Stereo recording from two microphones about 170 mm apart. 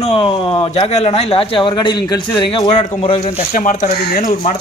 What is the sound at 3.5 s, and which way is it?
Speech, 50° left (ahead or behind).